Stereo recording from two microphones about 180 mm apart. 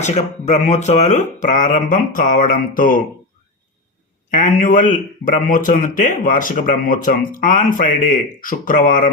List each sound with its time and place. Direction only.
0.0 s a man's voice: 40° left (ahead or behind)
4.3 s a man's voice: 45° left (ahead or behind)